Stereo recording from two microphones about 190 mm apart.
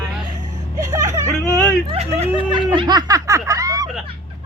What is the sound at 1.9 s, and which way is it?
Snicker, 35° right (ahead or behind).